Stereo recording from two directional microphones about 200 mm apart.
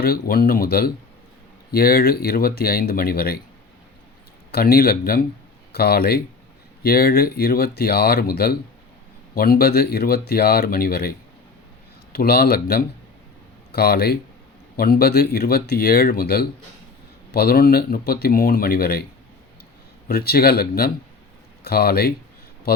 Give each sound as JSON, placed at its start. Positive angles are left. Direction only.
{"t": 0.0, "sound": "speech", "side_deg": 50}
{"t": 4.5, "sound": "speech", "side_deg": 50}
{"t": 20.1, "sound": "speech", "side_deg": 50}